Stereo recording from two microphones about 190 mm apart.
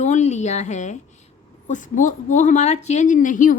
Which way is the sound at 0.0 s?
35° left (ahead or behind).